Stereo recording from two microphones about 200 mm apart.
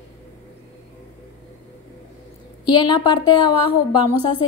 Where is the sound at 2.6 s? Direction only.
20° left (ahead or behind).